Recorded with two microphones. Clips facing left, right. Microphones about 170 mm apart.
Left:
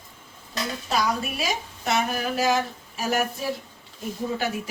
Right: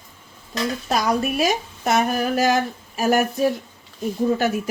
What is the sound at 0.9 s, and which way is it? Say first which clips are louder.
A woman's voice: right 4 dB; 45° right (ahead or behind).